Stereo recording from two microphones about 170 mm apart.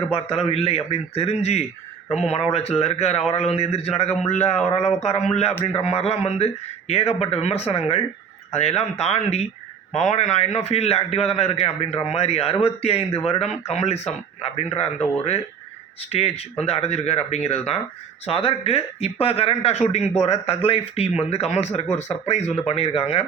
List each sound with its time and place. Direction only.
0.1 s a man's voice: 35° left (ahead or behind)
16.1 s a man's voice: 35° left (ahead or behind)